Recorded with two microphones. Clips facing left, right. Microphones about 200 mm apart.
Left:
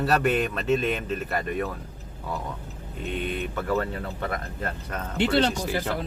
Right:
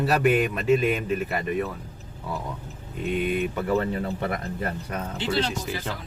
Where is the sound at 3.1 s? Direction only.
10° right (ahead or behind).